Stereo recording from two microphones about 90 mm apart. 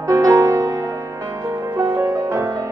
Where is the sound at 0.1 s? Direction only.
35° right (ahead or behind).